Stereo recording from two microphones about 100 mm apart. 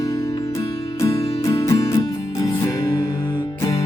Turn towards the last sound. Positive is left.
turn(degrees=45)  # may be behind; listen again after turning